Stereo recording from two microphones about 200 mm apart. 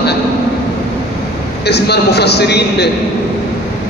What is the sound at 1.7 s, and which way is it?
A man's voice, 55° left (ahead or behind).